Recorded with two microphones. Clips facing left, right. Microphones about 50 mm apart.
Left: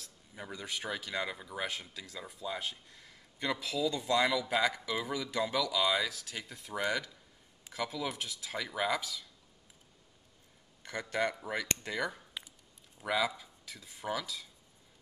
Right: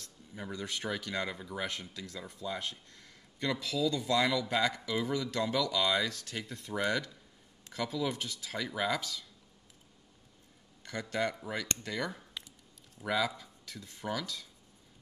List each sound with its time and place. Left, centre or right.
0.3 s speech: centre
10.8 s a man's voice: centre
12.4 s a sound: left
13.0 s speech: centre